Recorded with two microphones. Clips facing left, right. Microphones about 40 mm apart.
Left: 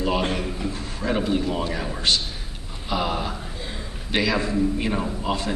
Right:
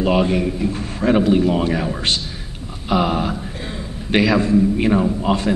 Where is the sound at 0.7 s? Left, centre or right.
Right.